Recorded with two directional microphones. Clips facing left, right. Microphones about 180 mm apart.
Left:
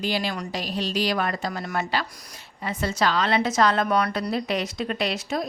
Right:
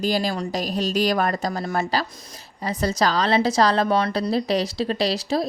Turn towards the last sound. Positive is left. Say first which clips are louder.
# right 4 dB
turn(degrees=-35)  # may be behind; listen again after turning